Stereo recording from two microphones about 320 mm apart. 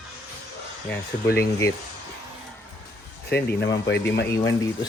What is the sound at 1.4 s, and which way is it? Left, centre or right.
Speech, centre.